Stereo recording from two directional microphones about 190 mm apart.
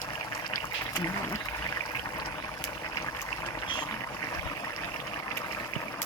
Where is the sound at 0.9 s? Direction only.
15° left (ahead or behind).